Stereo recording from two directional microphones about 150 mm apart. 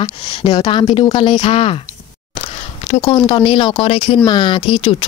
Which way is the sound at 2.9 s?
40° left (ahead or behind).